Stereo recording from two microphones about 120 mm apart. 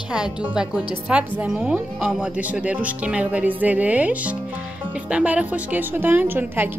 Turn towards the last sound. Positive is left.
turn(degrees=-15)  # may be behind; listen again after turning